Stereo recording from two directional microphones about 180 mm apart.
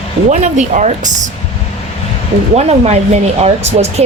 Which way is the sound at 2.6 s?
35° right (ahead or behind).